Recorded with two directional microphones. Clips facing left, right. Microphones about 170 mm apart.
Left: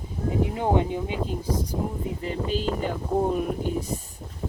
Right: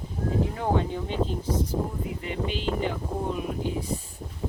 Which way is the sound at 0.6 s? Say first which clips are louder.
Left 3 dB; 15° left (ahead or behind).